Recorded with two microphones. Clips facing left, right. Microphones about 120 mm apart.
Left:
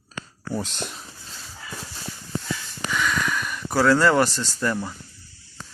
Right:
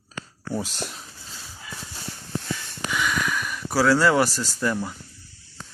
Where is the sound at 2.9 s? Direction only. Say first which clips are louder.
Left 1 dB; 10° right (ahead or behind).